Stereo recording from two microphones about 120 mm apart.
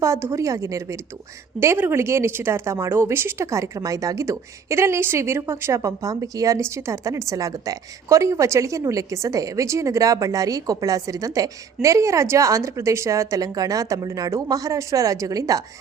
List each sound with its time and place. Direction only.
0.0 s a woman's voice: 25° right (ahead or behind)